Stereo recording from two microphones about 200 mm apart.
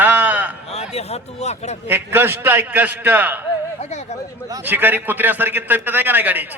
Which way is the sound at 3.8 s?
35° left (ahead or behind).